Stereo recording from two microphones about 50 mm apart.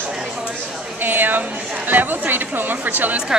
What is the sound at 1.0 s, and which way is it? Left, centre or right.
Speech, right.